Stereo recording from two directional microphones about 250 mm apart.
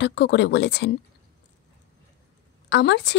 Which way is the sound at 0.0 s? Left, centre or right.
Left.